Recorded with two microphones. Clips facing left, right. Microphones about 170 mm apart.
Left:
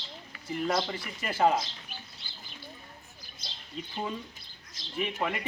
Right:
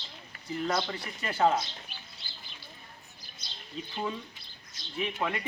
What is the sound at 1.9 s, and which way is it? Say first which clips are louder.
Chicken: left 4 dB; 50° left (ahead or behind).